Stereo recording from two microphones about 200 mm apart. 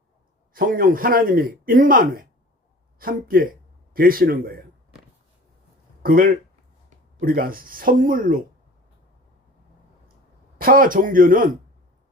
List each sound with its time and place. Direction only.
0.5 s speech: 45° right (ahead or behind)
6.0 s speech: 45° right (ahead or behind)
10.6 s speech: 45° right (ahead or behind)